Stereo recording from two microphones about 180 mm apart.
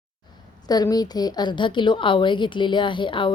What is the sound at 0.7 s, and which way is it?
A woman's voice, 20° left (ahead or behind).